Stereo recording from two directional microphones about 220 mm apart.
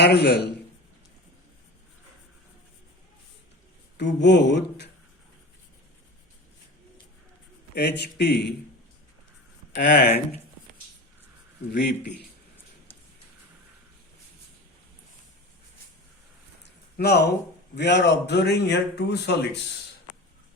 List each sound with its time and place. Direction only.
0.0 s a man's voice: 50° left (ahead or behind)
3.9 s a man's voice: 50° left (ahead or behind)
7.8 s a man's voice: 50° left (ahead or behind)
9.9 s speech: 40° left (ahead or behind)
11.7 s a man's voice: 50° left (ahead or behind)
16.6 s a sound: 50° left (ahead or behind)
17.7 s a man's voice: 50° left (ahead or behind)